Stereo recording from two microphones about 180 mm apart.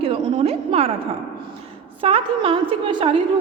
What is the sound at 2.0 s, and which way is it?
A woman's voice, 30° right (ahead or behind).